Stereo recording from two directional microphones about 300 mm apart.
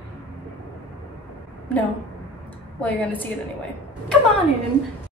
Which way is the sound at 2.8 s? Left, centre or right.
Centre.